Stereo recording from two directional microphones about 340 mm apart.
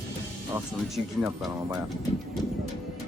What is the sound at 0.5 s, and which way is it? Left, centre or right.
Speech, centre.